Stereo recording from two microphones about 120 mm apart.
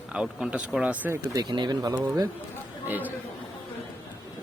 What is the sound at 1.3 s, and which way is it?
Speech, 35° right (ahead or behind).